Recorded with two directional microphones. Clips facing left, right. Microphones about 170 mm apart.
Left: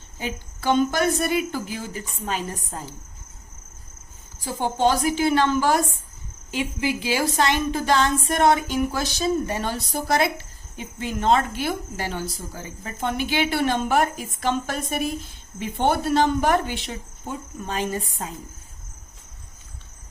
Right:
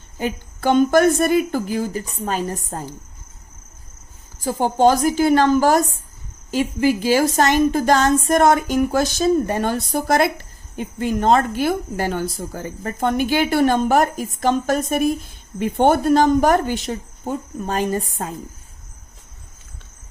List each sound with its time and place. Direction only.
0.2 s a woman's voice: 50° right (ahead or behind)
4.4 s a woman's voice: 45° right (ahead or behind)